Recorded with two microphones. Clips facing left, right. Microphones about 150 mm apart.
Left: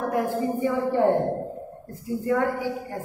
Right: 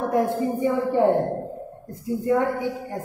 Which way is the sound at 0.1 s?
20° right (ahead or behind).